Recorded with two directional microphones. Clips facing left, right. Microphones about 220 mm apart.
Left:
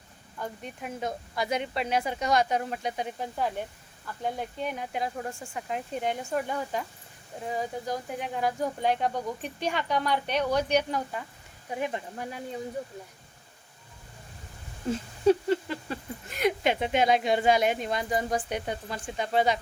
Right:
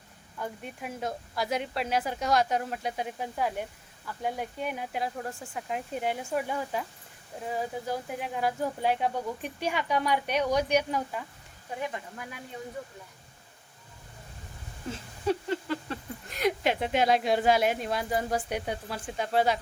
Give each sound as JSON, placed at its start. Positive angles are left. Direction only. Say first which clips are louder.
{"t": 0.3, "sound": "speech", "louder": "even", "side_deg": -5}
{"t": 11.8, "sound": "speech", "louder": "left 4 dB", "side_deg": 25}
{"t": 15.9, "sound": "speech", "louder": "left 1 dB", "side_deg": 0}